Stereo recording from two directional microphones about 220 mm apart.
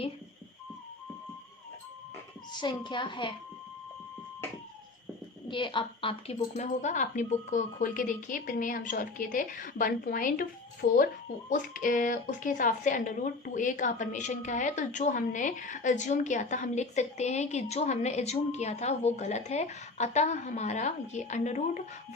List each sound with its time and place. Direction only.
2.5 s a woman's voice: 20° left (ahead or behind)
5.5 s a woman's voice: 20° left (ahead or behind)